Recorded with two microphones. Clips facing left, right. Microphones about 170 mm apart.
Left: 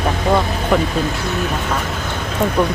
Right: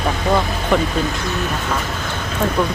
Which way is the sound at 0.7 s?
5° left (ahead or behind).